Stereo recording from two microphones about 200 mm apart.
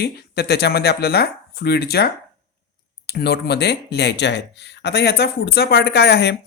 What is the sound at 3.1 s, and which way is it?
Speech, 55° left (ahead or behind).